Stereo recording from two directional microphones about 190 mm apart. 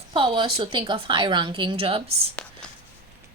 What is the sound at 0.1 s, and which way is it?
Speech, 25° right (ahead or behind).